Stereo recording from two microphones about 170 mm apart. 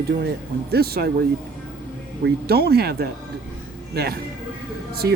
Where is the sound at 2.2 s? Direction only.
65° right (ahead or behind).